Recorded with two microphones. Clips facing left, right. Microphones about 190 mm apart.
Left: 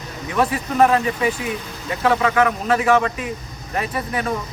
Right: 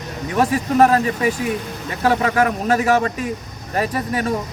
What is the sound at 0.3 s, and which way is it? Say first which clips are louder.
Speech: right 2 dB; 40° right (ahead or behind).